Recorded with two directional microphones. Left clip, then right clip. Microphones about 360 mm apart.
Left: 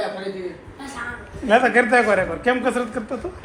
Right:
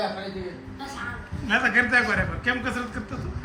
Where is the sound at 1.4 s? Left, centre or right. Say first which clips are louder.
Left 6 dB; centre.